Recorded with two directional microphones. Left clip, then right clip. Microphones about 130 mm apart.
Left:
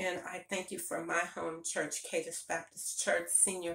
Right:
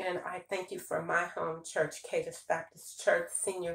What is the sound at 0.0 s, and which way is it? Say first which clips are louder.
Speech: right 2 dB; 20° left (ahead or behind).